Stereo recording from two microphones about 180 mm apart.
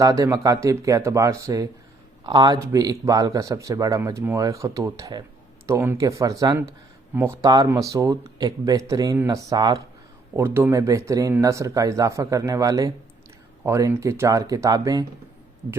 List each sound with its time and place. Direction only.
0.0 s speech: 20° right (ahead or behind)